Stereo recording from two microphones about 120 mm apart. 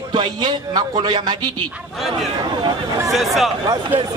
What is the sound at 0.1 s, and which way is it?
Speech, 40° right (ahead or behind).